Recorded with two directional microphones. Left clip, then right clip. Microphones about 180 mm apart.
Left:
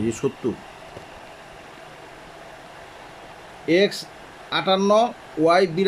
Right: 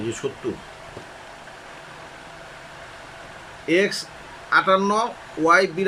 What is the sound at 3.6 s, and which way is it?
Speech, 25° left (ahead or behind).